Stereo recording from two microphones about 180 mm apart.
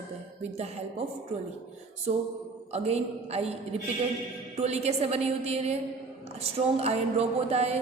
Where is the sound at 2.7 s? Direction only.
35° right (ahead or behind).